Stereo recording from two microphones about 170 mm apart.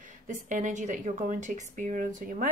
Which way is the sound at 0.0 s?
50° right (ahead or behind).